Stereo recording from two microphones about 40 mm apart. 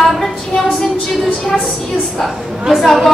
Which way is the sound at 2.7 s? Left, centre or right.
Centre.